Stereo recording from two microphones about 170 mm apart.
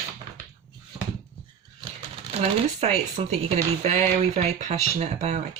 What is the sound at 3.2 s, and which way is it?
Speech, 35° right (ahead or behind).